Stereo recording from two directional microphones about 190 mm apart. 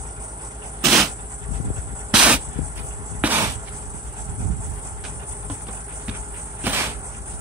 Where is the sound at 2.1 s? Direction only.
5° right (ahead or behind).